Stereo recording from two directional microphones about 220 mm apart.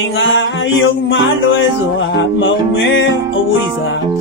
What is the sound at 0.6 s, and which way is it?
Music, 60° left (ahead or behind).